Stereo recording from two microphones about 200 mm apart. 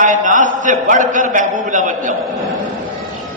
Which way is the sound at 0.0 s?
40° right (ahead or behind).